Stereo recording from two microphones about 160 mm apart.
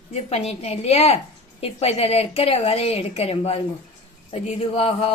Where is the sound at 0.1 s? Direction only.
40° left (ahead or behind).